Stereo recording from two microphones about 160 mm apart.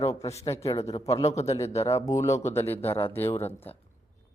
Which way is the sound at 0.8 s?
40° left (ahead or behind).